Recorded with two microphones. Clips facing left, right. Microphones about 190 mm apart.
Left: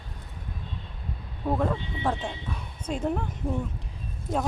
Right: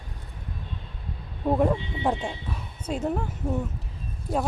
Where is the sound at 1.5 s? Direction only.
15° right (ahead or behind).